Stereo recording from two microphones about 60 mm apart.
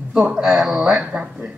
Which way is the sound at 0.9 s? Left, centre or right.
Centre.